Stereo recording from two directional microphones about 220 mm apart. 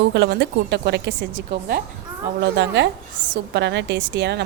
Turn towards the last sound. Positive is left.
turn(degrees=-50)  # may be behind; listen again after turning